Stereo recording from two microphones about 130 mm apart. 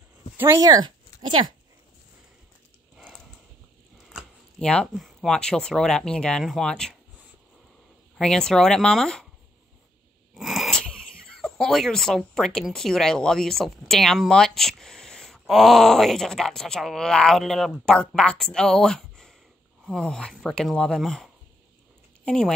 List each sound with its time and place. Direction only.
0.4 s speech: 25° right (ahead or behind)
4.1 s a sound: 5° left (ahead or behind)
4.9 s speech: centre (ahead or behind)
8.2 s speech: 5° left (ahead or behind)
10.3 s wheeze: centre (ahead or behind)
11.4 s speech: 5° left (ahead or behind)